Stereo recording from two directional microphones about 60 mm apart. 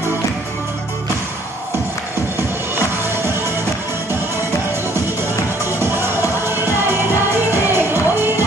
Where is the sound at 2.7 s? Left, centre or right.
Right.